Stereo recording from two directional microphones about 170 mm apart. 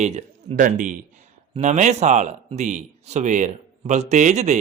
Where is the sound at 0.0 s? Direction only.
40° right (ahead or behind).